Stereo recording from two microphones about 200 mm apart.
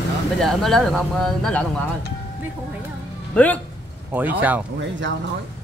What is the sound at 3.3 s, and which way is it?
Speech, 5° left (ahead or behind).